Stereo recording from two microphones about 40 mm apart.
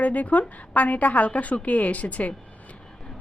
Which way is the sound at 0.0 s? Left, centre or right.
Left.